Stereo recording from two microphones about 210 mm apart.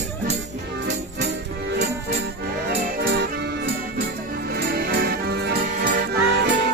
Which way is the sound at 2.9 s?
55° right (ahead or behind).